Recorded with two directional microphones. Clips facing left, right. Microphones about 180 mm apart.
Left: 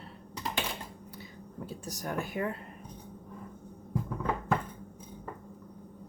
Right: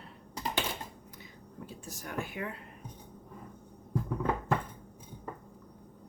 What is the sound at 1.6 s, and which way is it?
Speech, 40° left (ahead or behind).